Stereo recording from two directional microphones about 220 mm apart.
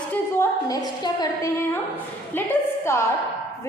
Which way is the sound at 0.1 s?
15° left (ahead or behind).